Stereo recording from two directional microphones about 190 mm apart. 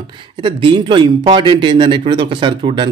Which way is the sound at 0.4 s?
25° right (ahead or behind).